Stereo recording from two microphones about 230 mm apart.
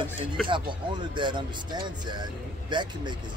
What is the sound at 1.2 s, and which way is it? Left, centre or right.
Speech, centre.